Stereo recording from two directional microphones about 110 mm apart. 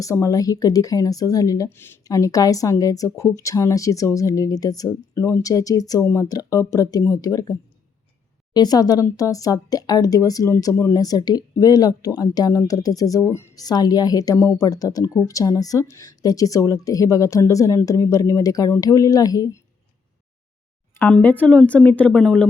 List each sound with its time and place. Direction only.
0.0 s speech: 30° left (ahead or behind)
1.7 s speech: 20° left (ahead or behind)
2.0 s speech: 30° left (ahead or behind)
8.5 s speech: 35° left (ahead or behind)
21.1 s a woman's voice: 15° left (ahead or behind)